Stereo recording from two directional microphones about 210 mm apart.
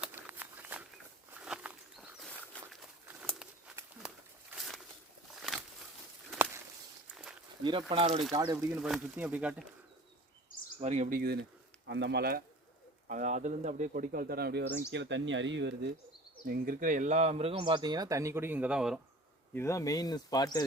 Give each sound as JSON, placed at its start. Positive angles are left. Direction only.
{"t": 0.0, "sound": "a sound", "side_deg": -10}
{"t": 1.3, "sound": "walk", "side_deg": -5}
{"t": 4.5, "sound": "a sound", "side_deg": 0}
{"t": 7.6, "sound": "speech", "side_deg": -25}
{"t": 8.7, "sound": "speech", "side_deg": -5}
{"t": 10.8, "sound": "speech", "side_deg": -35}
{"t": 11.9, "sound": "speech", "side_deg": -55}
{"t": 13.1, "sound": "speech", "side_deg": -35}
{"t": 14.8, "sound": "speech", "side_deg": -60}
{"t": 16.5, "sound": "speech", "side_deg": -40}
{"t": 19.5, "sound": "speech", "side_deg": 15}